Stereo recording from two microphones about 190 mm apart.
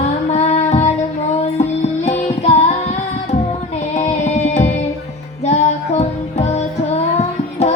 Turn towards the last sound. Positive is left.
turn(degrees=35)  # may be behind; listen again after turning